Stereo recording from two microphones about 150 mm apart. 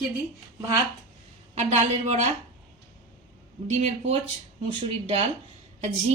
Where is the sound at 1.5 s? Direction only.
45° right (ahead or behind).